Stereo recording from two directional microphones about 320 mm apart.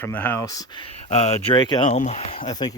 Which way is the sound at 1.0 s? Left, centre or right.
Centre.